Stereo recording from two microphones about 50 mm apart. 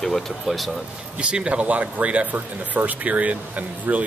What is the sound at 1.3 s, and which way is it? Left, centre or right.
Speech, right.